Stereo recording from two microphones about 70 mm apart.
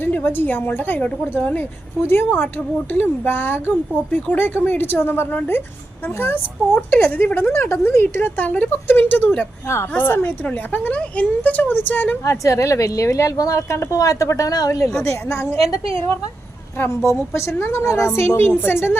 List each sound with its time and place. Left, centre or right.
0.0 s a woman's voice: left
10.7 s speech: left
12.2 s a woman's voice: left
15.0 s a woman's voice: left
16.7 s a woman's voice: left